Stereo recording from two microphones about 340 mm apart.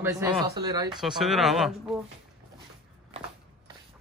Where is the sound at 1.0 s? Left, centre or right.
Centre.